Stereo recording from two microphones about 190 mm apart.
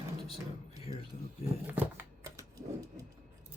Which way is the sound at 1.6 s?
10° right (ahead or behind).